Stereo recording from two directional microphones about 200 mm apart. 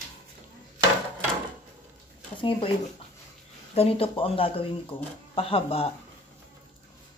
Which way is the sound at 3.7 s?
30° left (ahead or behind).